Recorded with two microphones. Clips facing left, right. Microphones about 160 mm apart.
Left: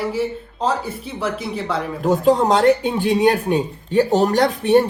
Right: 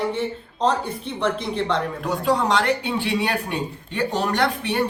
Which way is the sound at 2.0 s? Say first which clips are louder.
Left 8 dB; 45° left (ahead or behind).